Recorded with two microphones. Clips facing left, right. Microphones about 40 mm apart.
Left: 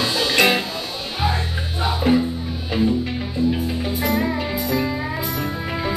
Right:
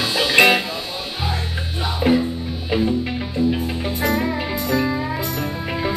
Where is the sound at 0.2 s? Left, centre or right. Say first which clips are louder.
Right 4 dB; centre.